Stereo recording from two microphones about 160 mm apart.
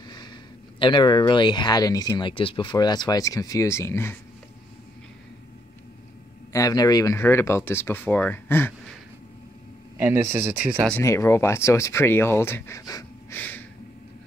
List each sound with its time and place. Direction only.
0.7 s speech: 30° left (ahead or behind)
6.5 s speech: 20° left (ahead or behind)
9.9 s speech: 15° right (ahead or behind)
10.9 s speech: 15° left (ahead or behind)
13.4 s a sound: 10° left (ahead or behind)